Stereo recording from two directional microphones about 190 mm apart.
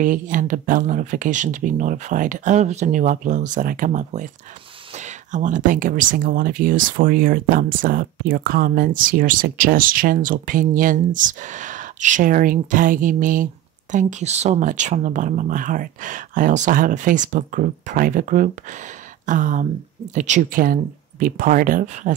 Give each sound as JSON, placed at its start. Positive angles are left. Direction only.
{"t": 0.0, "sound": "speech", "side_deg": -45}